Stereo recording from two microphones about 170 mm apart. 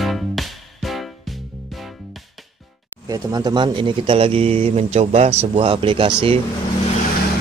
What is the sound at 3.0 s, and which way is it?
Speech, 25° right (ahead or behind).